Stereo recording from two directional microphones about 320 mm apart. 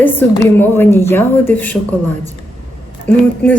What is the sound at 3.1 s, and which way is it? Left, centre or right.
Speech, centre.